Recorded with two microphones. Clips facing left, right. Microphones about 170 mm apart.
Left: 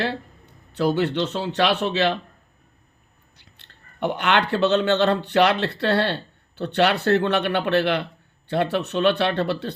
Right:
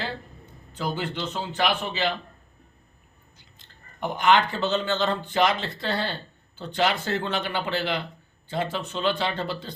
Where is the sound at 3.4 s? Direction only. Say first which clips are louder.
Left 3 dB; 70° left (ahead or behind).